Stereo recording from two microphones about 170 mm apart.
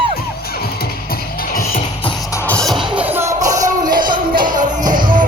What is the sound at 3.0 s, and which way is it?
Music, 10° right (ahead or behind).